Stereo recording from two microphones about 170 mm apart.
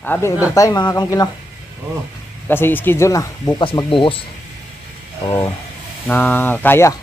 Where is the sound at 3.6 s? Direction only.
30° left (ahead or behind).